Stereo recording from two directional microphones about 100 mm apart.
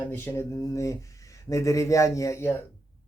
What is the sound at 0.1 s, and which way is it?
Speech, 20° left (ahead or behind).